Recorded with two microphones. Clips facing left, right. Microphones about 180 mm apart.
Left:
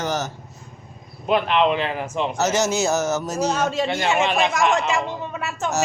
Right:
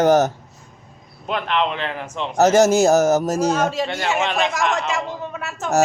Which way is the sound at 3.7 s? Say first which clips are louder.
Left 1 dB; 5° right (ahead or behind).